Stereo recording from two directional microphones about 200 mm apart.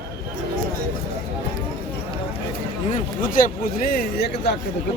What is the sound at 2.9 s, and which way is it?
Speech, 45° left (ahead or behind).